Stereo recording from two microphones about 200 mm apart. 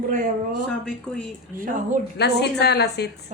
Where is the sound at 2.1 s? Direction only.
55° left (ahead or behind).